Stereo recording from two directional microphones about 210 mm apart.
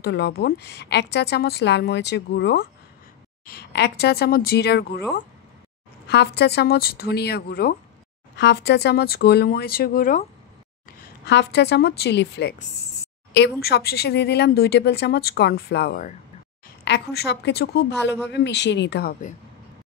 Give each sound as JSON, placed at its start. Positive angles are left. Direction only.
{"t": 0.0, "sound": "speech", "side_deg": 50}
{"t": 11.2, "sound": "speech", "side_deg": 55}